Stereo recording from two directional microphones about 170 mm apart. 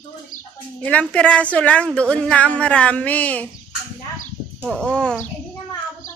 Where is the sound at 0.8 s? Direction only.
10° left (ahead or behind).